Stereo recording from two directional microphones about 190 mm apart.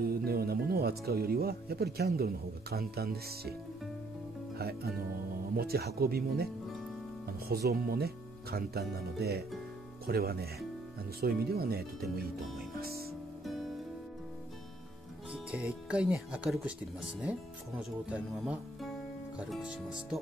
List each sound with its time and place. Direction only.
0.0 s speech: 55° right (ahead or behind)
4.6 s speech: 55° right (ahead or behind)
13.4 s music: centre (ahead or behind)
15.3 s speech: 5° right (ahead or behind)